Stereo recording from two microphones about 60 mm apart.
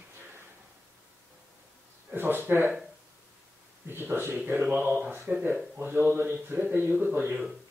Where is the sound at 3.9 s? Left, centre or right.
Right.